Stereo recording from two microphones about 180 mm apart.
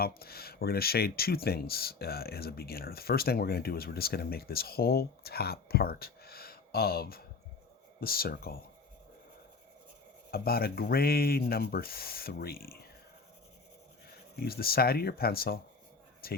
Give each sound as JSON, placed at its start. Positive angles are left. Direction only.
{"t": 0.0, "sound": "speech", "side_deg": 60}
{"t": 10.3, "sound": "speech", "side_deg": 60}
{"t": 14.3, "sound": "speech", "side_deg": 60}